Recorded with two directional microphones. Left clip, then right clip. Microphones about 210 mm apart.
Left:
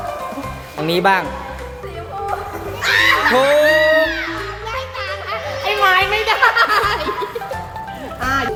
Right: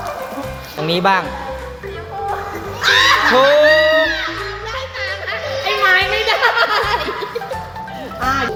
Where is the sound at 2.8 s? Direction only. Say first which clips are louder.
Right 2 dB; 15° left (ahead or behind).